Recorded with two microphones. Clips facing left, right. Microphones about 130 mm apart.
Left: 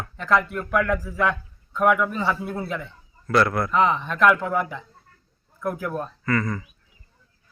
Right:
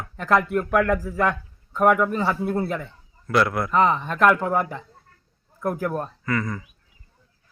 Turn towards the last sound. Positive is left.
turn(degrees=-5)  # may be behind; listen again after turning